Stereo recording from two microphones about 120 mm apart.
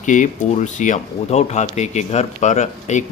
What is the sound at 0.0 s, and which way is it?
Speech, 90° left.